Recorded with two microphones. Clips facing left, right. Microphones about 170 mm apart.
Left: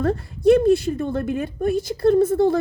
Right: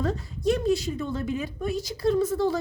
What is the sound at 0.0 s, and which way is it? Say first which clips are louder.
A woman's voice: left 8 dB; 60° left (ahead or behind).